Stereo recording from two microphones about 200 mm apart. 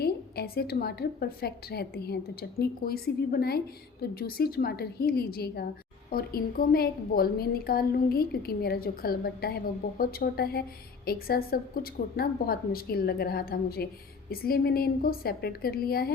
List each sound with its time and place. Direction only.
0.0 s a woman's voice: 50° left (ahead or behind)